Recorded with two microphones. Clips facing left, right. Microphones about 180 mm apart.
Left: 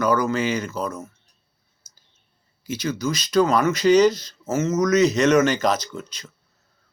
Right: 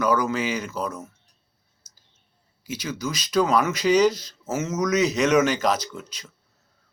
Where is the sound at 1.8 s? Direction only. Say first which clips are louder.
Left 1 dB; 35° right (ahead or behind).